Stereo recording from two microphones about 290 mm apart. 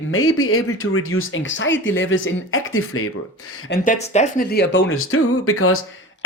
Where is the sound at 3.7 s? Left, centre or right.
Left.